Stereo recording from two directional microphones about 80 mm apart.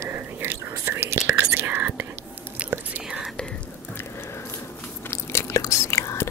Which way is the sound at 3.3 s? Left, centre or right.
Centre.